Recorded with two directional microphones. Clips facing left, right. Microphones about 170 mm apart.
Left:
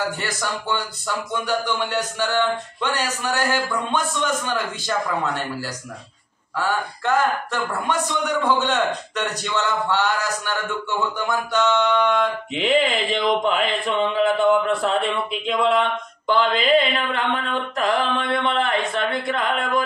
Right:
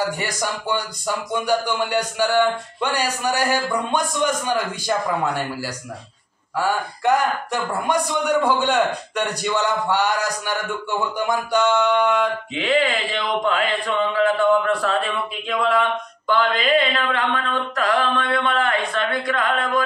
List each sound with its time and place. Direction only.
0.0 s speech: 15° right (ahead or behind)
6.5 s speech: 10° right (ahead or behind)
12.5 s mantra: 20° left (ahead or behind)